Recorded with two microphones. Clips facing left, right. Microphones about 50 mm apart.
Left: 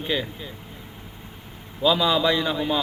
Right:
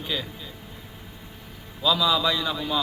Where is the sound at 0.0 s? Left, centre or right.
Left.